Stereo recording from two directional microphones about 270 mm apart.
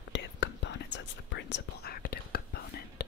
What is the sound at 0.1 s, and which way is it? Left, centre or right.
Whispering, left.